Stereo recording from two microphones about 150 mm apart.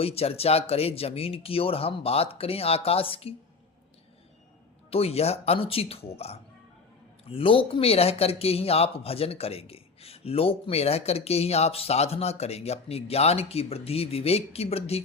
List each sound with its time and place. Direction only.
0.0 s speech: 40° left (ahead or behind)
4.9 s speech: 40° left (ahead or behind)